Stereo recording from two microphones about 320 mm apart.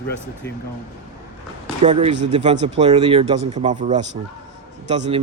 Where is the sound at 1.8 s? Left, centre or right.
Right.